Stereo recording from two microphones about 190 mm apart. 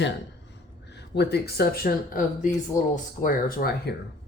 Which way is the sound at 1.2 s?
60° left (ahead or behind).